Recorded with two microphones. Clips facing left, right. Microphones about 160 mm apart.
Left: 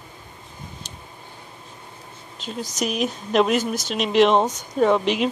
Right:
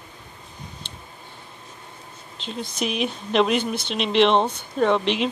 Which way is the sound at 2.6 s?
40° left (ahead or behind).